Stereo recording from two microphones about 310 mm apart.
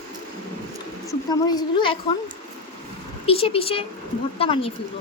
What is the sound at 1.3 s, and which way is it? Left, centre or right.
Speech, centre.